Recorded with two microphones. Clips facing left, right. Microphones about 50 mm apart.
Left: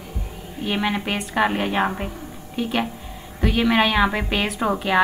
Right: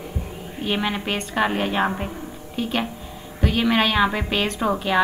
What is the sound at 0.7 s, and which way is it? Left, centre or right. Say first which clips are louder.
A woman's voice: left 1 dB; centre.